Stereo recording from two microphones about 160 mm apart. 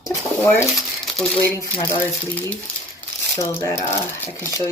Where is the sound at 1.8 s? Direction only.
15° left (ahead or behind).